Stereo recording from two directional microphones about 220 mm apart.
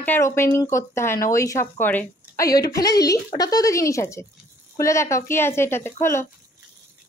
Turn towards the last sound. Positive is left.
turn(degrees=10)  # may be behind; listen again after turning